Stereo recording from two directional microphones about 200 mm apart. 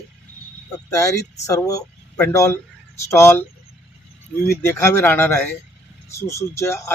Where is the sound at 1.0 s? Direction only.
15° left (ahead or behind).